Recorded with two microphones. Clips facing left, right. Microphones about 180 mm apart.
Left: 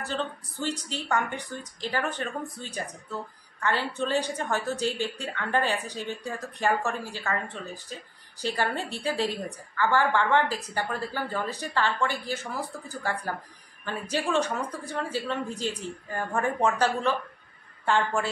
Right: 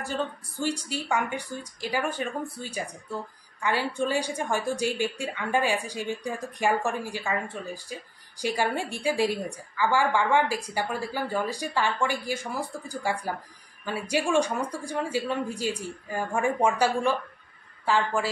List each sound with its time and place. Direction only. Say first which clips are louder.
0.0 s a woman's voice: right 1 dB; 10° right (ahead or behind)